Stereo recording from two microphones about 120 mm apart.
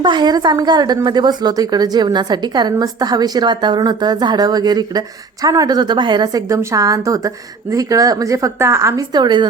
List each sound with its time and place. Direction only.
0.0 s a woman's voice: 35° right (ahead or behind)